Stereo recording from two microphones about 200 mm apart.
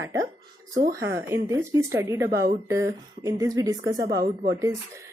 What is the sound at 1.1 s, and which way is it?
A woman's voice, 15° right (ahead or behind).